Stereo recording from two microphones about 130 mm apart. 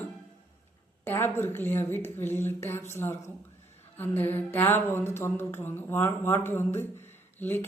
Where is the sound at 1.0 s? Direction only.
15° left (ahead or behind).